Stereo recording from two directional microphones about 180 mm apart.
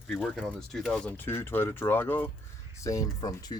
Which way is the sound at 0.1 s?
Centre (ahead or behind).